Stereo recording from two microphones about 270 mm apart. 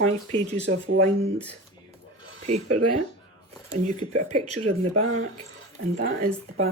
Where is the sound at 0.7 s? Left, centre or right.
Right.